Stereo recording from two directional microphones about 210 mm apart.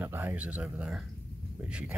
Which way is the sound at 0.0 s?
10° right (ahead or behind).